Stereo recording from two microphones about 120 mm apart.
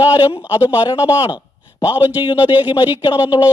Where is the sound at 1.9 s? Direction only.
15° right (ahead or behind).